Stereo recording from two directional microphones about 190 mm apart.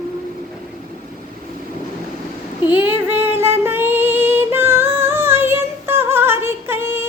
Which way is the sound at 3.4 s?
10° right (ahead or behind).